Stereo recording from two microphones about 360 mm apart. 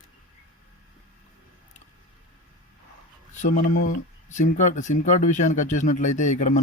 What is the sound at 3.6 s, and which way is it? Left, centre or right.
Speech, left.